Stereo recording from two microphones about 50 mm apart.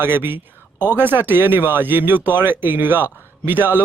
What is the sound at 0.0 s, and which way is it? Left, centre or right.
Speech, right.